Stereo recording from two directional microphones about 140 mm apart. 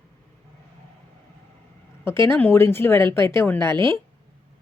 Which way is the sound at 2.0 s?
20° left (ahead or behind).